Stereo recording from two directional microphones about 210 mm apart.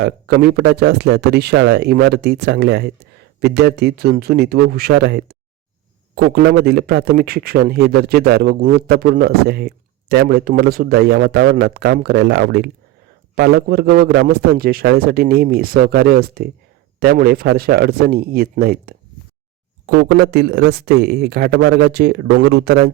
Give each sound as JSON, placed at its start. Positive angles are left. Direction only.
{"t": 0.0, "sound": "speech", "side_deg": -50}